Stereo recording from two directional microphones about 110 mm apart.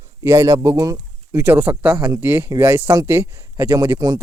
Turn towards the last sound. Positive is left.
turn(degrees=-35)  # may be behind; listen again after turning